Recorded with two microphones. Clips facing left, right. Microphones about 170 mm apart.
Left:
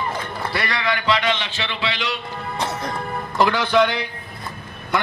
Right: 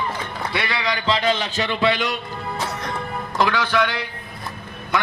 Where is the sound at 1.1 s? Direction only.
35° right (ahead or behind).